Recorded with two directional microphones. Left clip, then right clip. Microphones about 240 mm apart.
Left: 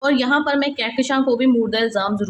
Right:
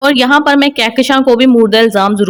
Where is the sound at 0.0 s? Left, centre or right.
Right.